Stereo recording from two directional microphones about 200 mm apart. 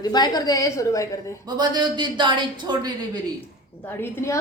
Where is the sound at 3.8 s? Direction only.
10° left (ahead or behind).